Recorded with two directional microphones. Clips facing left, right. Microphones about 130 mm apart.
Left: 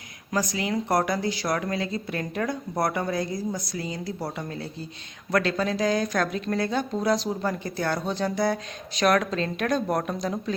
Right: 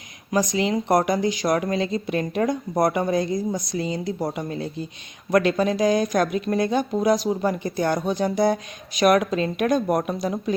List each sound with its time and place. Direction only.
0.3 s speech: 20° right (ahead or behind)